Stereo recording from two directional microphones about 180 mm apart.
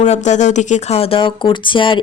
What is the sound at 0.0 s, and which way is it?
Speech, 40° left (ahead or behind).